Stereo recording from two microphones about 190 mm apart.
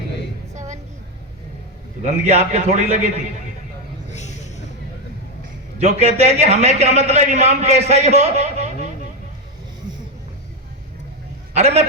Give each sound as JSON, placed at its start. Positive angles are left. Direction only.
{"t": 2.2, "sound": "a man's voice", "side_deg": -35}
{"t": 4.1, "sound": "a sound", "side_deg": 35}
{"t": 5.8, "sound": "a man's voice", "side_deg": -35}
{"t": 11.5, "sound": "a man's voice", "side_deg": -35}